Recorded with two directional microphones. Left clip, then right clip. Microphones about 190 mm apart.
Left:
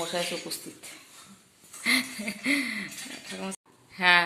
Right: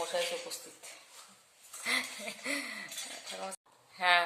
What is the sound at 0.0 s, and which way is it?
Speech, 20° left (ahead or behind).